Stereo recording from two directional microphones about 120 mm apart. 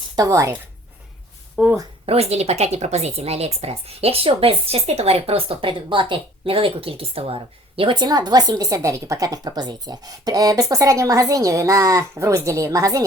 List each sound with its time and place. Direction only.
0.2 s speech: 25° right (ahead or behind)
1.6 s speech: 5° right (ahead or behind)
2.0 s speech: 60° right (ahead or behind); by 13.1 s 30° right (ahead or behind)